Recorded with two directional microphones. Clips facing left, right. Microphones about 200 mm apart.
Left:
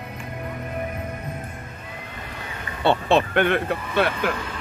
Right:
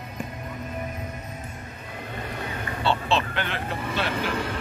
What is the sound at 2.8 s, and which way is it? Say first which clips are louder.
Speech: left 6 dB; 55° left (ahead or behind).